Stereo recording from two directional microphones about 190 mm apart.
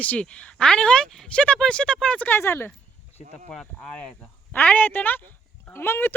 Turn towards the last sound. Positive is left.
turn(degrees=10)  # may be behind; listen again after turning